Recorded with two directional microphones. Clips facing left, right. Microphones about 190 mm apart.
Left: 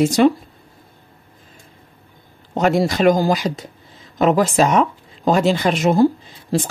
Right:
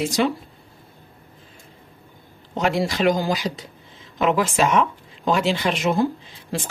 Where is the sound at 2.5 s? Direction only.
45° left (ahead or behind).